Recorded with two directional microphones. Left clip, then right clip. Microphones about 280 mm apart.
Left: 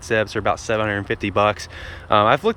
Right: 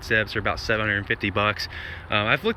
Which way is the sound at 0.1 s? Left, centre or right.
Centre.